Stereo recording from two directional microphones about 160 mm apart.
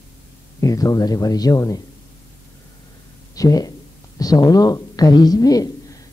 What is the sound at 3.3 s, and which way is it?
Speech, 20° left (ahead or behind).